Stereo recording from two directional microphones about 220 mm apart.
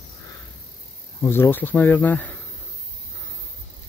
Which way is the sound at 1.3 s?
10° left (ahead or behind).